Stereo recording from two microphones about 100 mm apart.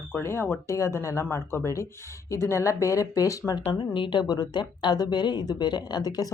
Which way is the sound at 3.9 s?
50° left (ahead or behind).